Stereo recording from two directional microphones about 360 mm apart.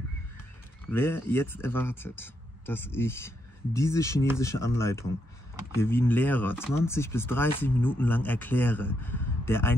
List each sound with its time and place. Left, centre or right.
0.9 s speech: centre